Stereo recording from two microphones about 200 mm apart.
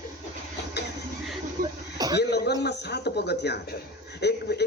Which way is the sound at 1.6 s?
45° right (ahead or behind).